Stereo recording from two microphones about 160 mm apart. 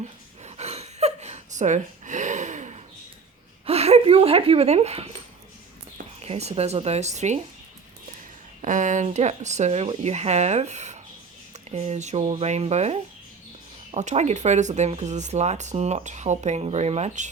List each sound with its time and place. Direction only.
0.0 s a sound: 45° right (ahead or behind)
3.7 s speech: 40° right (ahead or behind)
6.2 s speech: 40° right (ahead or behind)
8.6 s speech: 50° right (ahead or behind)